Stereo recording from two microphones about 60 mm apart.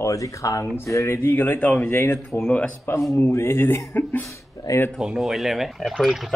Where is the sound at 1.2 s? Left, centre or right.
Left.